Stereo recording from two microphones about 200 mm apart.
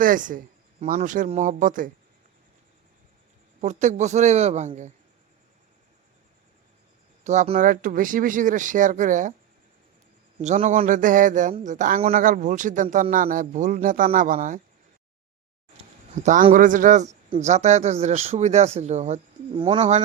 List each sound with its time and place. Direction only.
0.0 s speech: 40° right (ahead or behind)
3.6 s speech: 35° right (ahead or behind)
7.3 s speech: 35° right (ahead or behind)
10.4 s speech: 35° right (ahead or behind)
16.2 s speech: 40° right (ahead or behind)
19.5 s speech: 25° right (ahead or behind)